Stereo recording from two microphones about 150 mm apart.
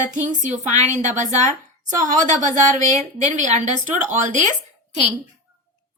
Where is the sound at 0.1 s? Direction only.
55° right (ahead or behind).